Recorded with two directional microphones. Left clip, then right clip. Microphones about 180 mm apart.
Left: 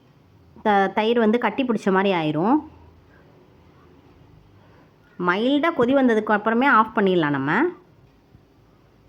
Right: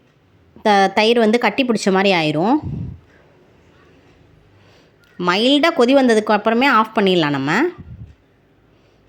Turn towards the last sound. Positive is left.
turn(degrees=-25)  # may be behind; listen again after turning